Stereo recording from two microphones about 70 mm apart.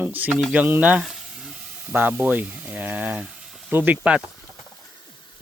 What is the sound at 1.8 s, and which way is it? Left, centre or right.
Speech, right.